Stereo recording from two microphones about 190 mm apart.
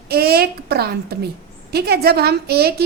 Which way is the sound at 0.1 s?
55° right (ahead or behind).